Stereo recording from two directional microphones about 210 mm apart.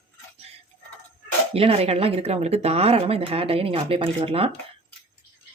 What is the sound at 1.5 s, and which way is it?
Speech, 30° right (ahead or behind).